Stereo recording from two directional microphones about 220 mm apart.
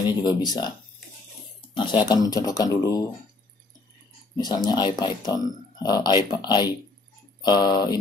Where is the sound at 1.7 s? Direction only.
20° left (ahead or behind).